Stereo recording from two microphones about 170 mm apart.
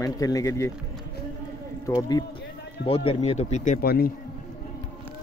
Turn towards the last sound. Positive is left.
turn(degrees=65)  # may be behind; listen again after turning